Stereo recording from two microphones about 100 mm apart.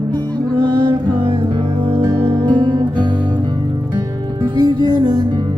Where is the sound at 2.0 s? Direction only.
30° right (ahead or behind).